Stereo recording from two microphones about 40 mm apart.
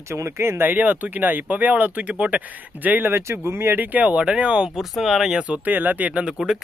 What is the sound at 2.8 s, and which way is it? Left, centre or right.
Speech, right.